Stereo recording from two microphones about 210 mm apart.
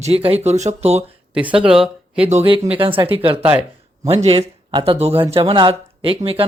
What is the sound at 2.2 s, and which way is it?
Speech, 30° right (ahead or behind).